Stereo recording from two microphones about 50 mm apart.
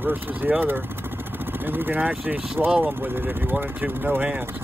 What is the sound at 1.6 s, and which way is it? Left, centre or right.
Speech, right.